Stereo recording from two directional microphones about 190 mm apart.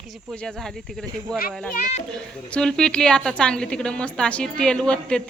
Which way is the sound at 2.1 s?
5° left (ahead or behind).